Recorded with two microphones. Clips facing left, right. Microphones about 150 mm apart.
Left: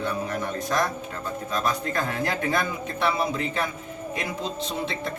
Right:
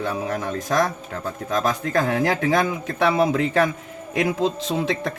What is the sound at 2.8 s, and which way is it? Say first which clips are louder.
Speech: right 6 dB; 90° right.